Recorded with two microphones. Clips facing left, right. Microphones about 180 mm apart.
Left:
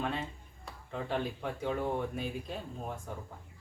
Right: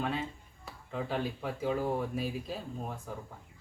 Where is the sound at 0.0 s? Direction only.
Centre (ahead or behind).